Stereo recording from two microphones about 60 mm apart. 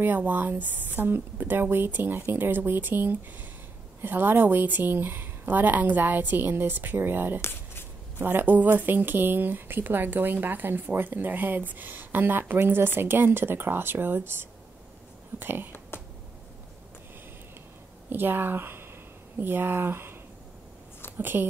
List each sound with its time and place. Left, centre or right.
0.0 s speech: right
15.9 s finger snapping: left
18.1 s speech: right
21.2 s speech: right